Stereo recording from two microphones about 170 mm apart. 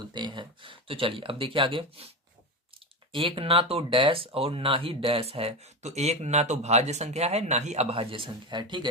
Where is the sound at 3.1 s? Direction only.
30° right (ahead or behind).